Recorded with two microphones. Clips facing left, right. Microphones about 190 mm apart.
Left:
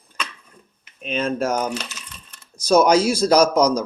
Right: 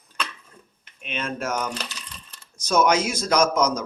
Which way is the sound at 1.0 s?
35° left (ahead or behind).